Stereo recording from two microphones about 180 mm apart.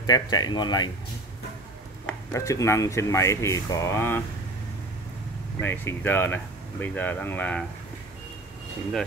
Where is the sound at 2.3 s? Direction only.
15° left (ahead or behind).